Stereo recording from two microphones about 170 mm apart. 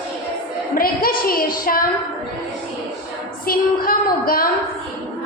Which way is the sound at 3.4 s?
60° left (ahead or behind).